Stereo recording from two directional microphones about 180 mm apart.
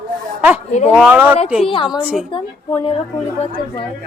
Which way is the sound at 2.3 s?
25° left (ahead or behind).